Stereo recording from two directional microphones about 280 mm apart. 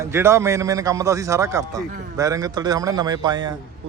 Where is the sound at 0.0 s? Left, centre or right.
Centre.